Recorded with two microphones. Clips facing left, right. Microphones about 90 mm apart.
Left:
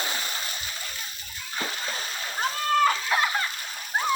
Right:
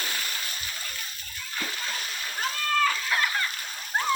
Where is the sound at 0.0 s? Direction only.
25° left (ahead or behind).